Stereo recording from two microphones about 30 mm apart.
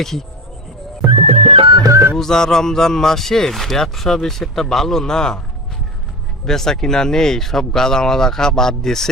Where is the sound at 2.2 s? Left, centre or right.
Centre.